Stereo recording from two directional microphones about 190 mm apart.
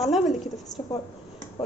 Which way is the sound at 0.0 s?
Centre (ahead or behind).